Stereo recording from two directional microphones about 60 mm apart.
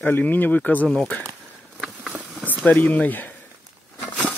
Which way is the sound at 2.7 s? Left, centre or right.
Left.